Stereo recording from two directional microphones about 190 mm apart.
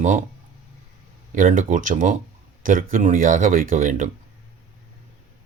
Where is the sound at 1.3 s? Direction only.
45° right (ahead or behind).